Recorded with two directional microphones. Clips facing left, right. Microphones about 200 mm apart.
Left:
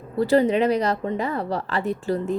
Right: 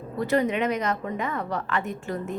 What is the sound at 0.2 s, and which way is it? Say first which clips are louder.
A woman's voice: left 5 dB; 30° left (ahead or behind).